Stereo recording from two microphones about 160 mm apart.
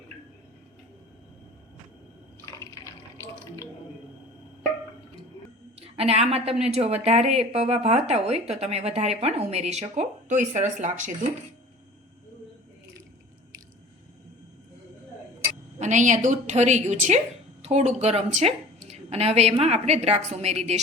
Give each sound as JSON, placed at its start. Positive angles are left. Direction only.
{"t": 2.5, "sound": "water", "side_deg": 20}
{"t": 5.8, "sound": "a sound", "side_deg": -40}
{"t": 6.6, "sound": "speech", "side_deg": -40}
{"t": 15.8, "sound": "a woman's voice", "side_deg": -50}